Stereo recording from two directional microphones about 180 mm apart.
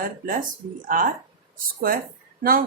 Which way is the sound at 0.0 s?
50° right (ahead or behind).